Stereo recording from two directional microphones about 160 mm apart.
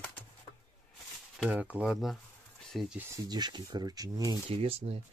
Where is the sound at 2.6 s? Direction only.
Centre (ahead or behind).